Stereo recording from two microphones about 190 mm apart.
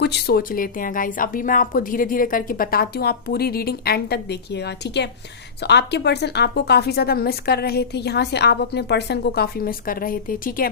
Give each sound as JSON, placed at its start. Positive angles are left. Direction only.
{"t": 0.0, "sound": "speech", "side_deg": 55}